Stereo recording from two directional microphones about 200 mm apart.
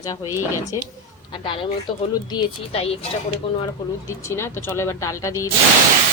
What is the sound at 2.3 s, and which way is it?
Speech, 30° left (ahead or behind).